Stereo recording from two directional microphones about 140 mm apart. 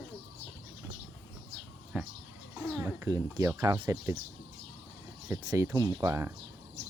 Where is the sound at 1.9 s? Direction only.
10° right (ahead or behind).